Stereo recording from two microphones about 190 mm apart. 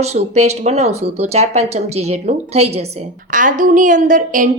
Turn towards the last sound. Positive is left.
turn(degrees=-45)  # may be behind; listen again after turning